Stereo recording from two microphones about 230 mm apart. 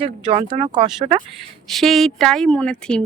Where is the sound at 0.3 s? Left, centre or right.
Right.